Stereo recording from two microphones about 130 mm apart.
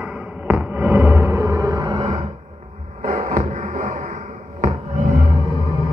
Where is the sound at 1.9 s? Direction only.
40° right (ahead or behind).